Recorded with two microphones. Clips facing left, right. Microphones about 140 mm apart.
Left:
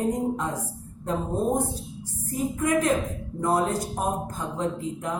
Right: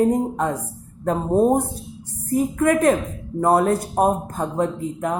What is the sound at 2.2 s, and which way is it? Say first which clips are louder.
Speech: right 7 dB; 65° right (ahead or behind).